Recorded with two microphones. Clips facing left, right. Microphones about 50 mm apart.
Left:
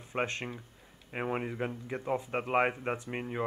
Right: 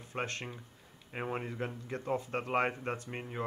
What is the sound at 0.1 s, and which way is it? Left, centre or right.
Speech, left.